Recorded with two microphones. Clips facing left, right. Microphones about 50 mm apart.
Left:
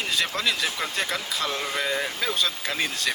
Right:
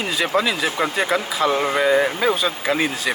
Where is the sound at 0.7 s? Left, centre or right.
Right.